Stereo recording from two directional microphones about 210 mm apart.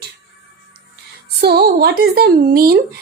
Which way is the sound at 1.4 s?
45° right (ahead or behind).